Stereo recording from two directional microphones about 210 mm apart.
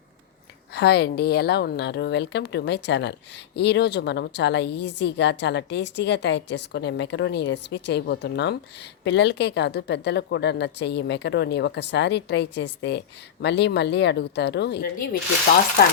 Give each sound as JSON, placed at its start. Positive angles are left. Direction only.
{"t": 0.7, "sound": "a woman's voice", "side_deg": 50}